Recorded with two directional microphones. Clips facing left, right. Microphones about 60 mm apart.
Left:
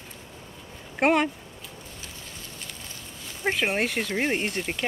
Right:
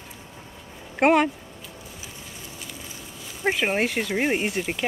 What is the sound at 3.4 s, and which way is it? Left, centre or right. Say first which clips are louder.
Speech: right 2 dB; centre.